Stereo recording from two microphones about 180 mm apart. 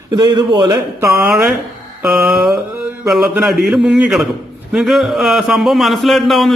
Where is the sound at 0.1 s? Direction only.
25° right (ahead or behind).